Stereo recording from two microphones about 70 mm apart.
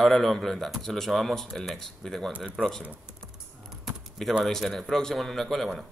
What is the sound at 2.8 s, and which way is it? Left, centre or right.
Speech, right.